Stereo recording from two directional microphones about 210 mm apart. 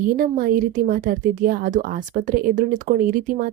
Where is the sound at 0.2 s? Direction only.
40° right (ahead or behind).